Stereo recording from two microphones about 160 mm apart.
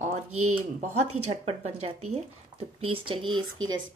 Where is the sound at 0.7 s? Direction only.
45° right (ahead or behind).